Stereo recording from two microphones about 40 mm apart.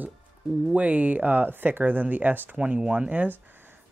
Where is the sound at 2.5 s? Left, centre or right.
Right.